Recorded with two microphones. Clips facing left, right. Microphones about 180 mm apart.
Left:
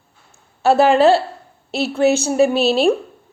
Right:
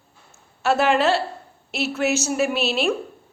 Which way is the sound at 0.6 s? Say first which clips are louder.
Left 6 dB; 35° left (ahead or behind).